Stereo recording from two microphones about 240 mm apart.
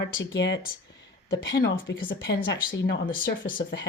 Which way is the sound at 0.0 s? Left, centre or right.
Left.